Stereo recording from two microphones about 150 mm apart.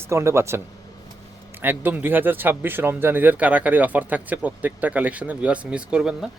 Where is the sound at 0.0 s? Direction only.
20° right (ahead or behind).